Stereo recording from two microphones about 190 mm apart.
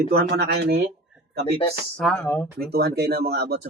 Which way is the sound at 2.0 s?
5° left (ahead or behind).